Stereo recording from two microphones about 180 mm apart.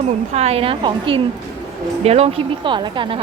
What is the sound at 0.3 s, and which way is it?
A woman's voice, 35° right (ahead or behind).